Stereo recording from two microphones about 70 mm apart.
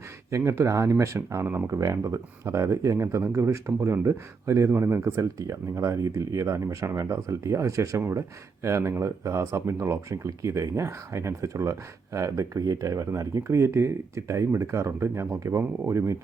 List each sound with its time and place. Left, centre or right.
0.3 s speech: right
1.8 s speech: right